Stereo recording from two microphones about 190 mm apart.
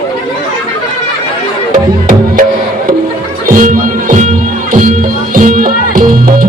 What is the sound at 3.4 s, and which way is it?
Music, 45° right (ahead or behind).